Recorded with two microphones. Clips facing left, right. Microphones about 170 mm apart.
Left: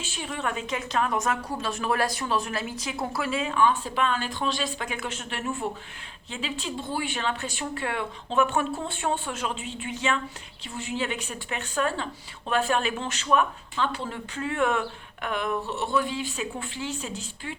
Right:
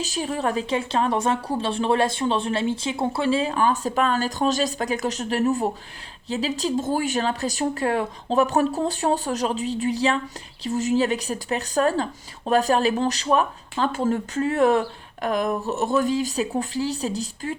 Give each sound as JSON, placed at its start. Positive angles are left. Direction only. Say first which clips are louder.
{"t": 0.0, "sound": "a woman's voice", "louder": "right 7 dB", "side_deg": -40}